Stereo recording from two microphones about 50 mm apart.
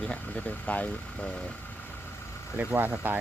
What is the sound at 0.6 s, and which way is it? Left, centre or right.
Speech, left.